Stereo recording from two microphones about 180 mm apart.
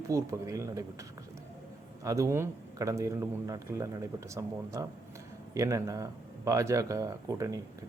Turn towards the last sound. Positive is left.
turn(degrees=-20)  # may be behind; listen again after turning